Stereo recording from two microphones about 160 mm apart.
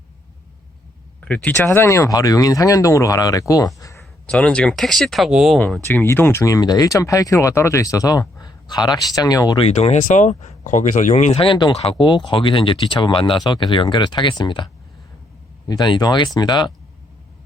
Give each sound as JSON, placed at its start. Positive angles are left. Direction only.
{"t": 1.2, "sound": "speech", "side_deg": 10}
{"t": 4.3, "sound": "speech", "side_deg": 5}
{"t": 5.5, "sound": "speech", "side_deg": 10}
{"t": 9.6, "sound": "speech", "side_deg": 45}